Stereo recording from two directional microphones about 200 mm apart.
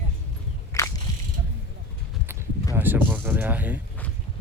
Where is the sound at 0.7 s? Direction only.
15° left (ahead or behind).